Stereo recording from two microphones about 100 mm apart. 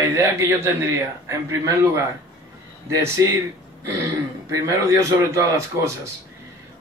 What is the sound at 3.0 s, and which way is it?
A man's voice, 30° right (ahead or behind).